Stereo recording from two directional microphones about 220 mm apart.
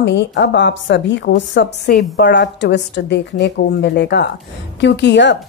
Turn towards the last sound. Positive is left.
turn(degrees=50)  # may be behind; listen again after turning